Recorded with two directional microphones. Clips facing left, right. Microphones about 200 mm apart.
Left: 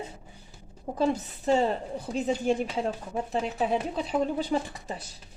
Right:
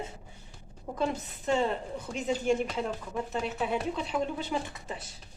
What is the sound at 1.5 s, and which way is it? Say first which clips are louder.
A woman's voice: left 4 dB; 35° left (ahead or behind).